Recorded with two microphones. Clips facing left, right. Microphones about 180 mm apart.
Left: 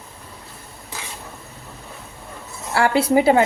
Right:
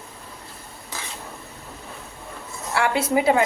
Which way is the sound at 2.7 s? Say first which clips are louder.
Left 4 dB; 30° left (ahead or behind).